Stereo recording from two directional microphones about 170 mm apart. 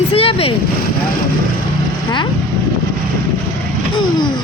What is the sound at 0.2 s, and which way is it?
Vehicle, 35° left (ahead or behind).